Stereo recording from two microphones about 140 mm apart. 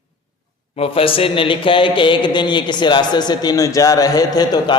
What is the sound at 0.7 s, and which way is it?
Speech, 40° left (ahead or behind).